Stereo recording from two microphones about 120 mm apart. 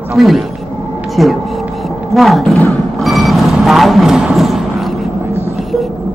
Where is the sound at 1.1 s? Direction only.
Centre (ahead or behind).